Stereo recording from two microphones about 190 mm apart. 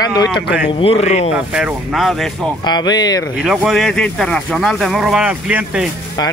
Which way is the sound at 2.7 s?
20° left (ahead or behind).